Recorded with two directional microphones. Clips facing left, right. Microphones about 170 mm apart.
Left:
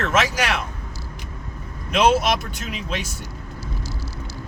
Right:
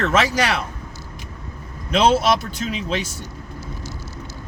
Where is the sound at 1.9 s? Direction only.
30° right (ahead or behind).